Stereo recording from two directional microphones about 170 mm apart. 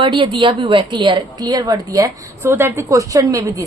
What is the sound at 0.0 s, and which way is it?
A woman's voice, 30° right (ahead or behind).